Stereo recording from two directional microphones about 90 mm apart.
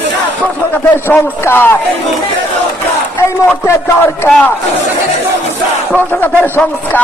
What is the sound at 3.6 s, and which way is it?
Speech, 30° left (ahead or behind).